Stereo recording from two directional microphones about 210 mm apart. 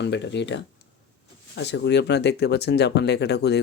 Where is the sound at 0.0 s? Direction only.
55° left (ahead or behind).